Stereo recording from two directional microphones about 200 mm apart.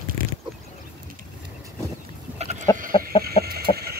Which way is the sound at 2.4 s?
35° right (ahead or behind).